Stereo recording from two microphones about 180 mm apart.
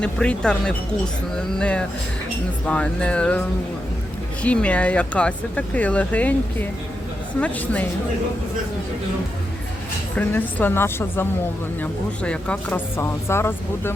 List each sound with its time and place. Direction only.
0.0 s speech: 5° left (ahead or behind)
4.4 s speech: 5° left (ahead or behind)
10.2 s speech: 10° left (ahead or behind)